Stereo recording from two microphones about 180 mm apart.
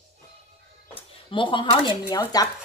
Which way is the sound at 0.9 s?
30° left (ahead or behind).